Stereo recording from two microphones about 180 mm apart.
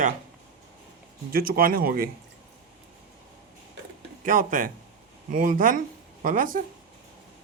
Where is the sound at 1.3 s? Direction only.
55° right (ahead or behind).